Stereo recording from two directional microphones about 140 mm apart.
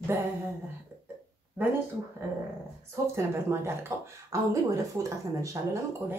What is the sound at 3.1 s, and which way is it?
Speech, 20° right (ahead or behind).